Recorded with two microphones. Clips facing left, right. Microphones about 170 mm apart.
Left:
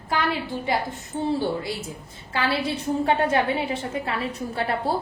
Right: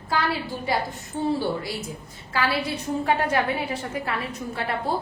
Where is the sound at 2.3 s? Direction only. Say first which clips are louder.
Left 1 dB; 25° left (ahead or behind).